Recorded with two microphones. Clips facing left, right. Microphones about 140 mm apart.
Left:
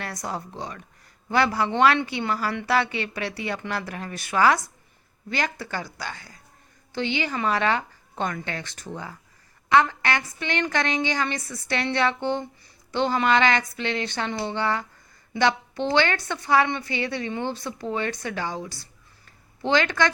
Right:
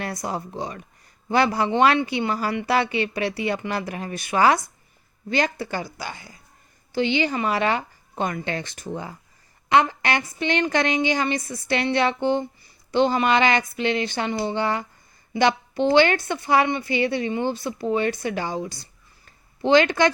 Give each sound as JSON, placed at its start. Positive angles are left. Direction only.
{"t": 0.0, "sound": "a man's voice", "side_deg": -15}
{"t": 7.3, "sound": "speech", "side_deg": -10}